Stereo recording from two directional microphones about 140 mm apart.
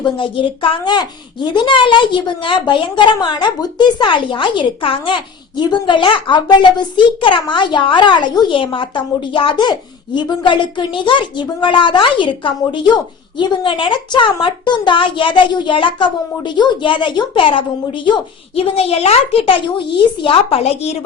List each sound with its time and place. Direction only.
0.0 s a woman's voice: 35° left (ahead or behind)